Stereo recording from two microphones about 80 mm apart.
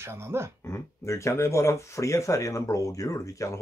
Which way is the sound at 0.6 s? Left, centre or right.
Left.